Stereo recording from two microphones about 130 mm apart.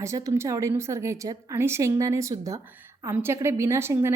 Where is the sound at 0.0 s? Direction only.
25° right (ahead or behind).